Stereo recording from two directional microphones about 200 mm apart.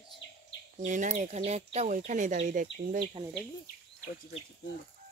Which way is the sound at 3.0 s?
25° right (ahead or behind).